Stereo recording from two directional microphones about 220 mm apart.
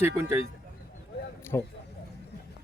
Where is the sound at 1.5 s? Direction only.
10° left (ahead or behind).